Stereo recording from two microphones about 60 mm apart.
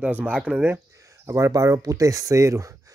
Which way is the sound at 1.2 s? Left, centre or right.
Right.